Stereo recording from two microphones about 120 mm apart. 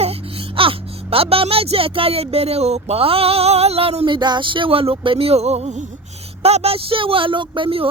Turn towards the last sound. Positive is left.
turn(degrees=-45)  # may be behind; listen again after turning